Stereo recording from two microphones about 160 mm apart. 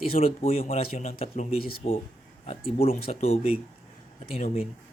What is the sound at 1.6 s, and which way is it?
Speech, 70° left (ahead or behind).